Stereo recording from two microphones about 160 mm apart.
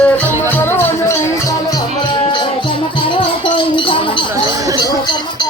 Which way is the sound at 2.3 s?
30° left (ahead or behind).